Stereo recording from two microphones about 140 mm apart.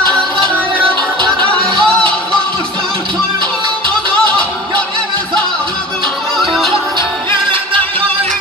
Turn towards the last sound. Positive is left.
turn(degrees=-35)  # may be behind; listen again after turning